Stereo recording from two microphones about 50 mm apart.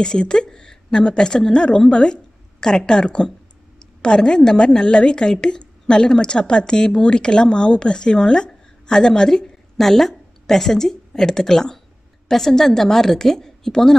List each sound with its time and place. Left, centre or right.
0.0 s a woman's voice: centre